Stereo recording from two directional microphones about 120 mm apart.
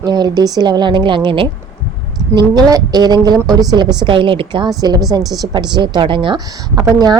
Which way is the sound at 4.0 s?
45° right (ahead or behind).